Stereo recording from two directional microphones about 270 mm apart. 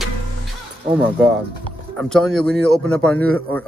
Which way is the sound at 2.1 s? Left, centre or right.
Centre.